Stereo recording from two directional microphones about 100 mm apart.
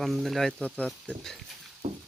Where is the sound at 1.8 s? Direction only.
80° right.